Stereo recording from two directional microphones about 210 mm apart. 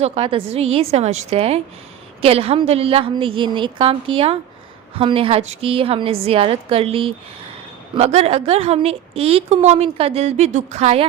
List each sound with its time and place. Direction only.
0.0 s a woman's voice: 25° right (ahead or behind)